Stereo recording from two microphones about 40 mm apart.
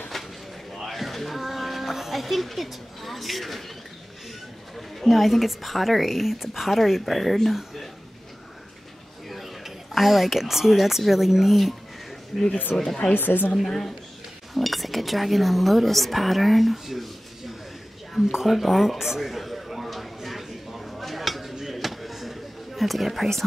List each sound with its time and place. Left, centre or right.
0.1 s a sound: centre
0.8 s a woman's voice: centre
5.0 s speech: centre
9.3 s speech: centre
12.7 s speech: centre
13.1 s a woman's voice: left
13.7 s speech: centre
18.3 s a sound: centre